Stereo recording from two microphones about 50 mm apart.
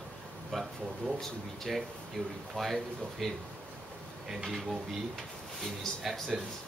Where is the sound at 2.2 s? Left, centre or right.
Centre.